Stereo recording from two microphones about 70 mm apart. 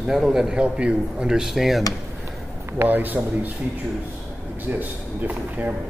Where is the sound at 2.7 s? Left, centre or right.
Right.